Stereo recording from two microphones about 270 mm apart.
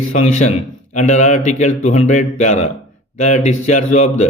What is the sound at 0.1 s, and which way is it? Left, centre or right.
A man's voice, left.